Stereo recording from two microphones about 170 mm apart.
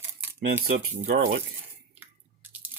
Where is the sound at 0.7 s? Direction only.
60° right (ahead or behind).